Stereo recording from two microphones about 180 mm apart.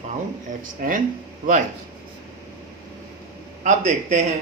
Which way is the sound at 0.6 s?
50° right (ahead or behind).